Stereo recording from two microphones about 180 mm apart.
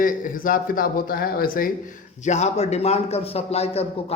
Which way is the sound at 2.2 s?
40° left (ahead or behind).